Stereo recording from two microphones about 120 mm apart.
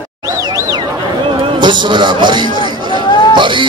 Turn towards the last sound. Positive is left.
turn(degrees=-40)  # may be behind; listen again after turning